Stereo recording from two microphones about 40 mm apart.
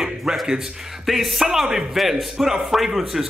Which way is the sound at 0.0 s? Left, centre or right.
Centre.